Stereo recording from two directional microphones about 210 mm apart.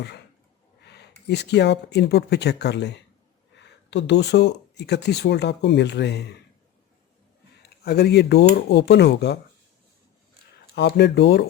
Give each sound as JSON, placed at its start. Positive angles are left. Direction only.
{"t": 0.9, "sound": "speech", "side_deg": 50}
{"t": 7.9, "sound": "speech", "side_deg": 50}
{"t": 10.8, "sound": "speech", "side_deg": 55}